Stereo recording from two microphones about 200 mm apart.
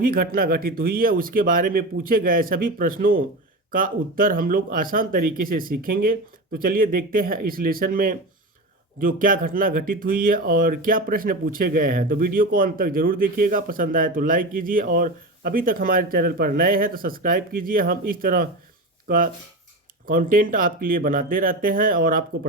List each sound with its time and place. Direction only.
0.0 s speech: 45° right (ahead or behind)